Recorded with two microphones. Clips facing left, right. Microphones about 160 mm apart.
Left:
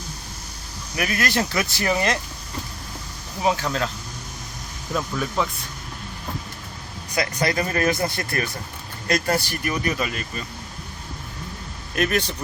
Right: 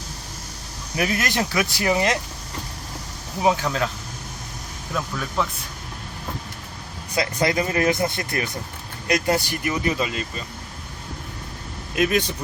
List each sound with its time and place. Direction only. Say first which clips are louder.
0.9 s speech: even; 20° right (ahead or behind)
3.4 s speech: right 2 dB; 15° right (ahead or behind)
5.4 s speech: even; centre (ahead or behind)
7.2 s speech: right 1 dB; 20° right (ahead or behind)
11.9 s speech: right 2 dB; 15° right (ahead or behind)